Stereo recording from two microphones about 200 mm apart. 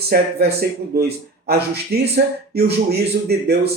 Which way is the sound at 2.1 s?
55° right (ahead or behind).